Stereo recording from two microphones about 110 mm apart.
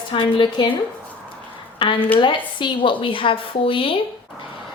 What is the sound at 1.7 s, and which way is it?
A woman's voice, 50° left (ahead or behind).